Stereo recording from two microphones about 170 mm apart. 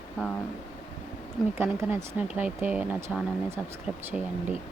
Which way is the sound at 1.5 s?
15° right (ahead or behind).